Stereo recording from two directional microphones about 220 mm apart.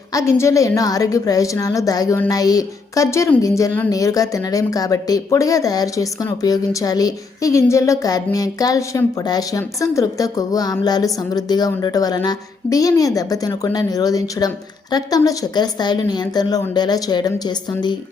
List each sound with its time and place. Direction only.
0.1 s a woman's voice: 15° left (ahead or behind)